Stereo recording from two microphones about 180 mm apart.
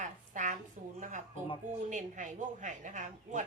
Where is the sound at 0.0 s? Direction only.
45° right (ahead or behind).